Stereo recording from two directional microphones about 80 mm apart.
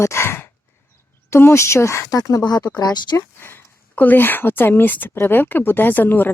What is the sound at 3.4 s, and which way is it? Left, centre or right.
Speech, left.